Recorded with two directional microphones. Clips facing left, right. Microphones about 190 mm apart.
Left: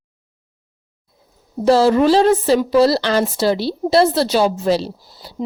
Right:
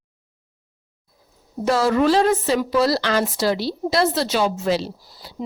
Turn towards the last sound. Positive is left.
turn(degrees=30)  # may be behind; listen again after turning